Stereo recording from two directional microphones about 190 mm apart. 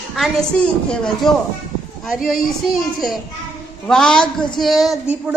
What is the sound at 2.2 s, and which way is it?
Speech, 50° left (ahead or behind).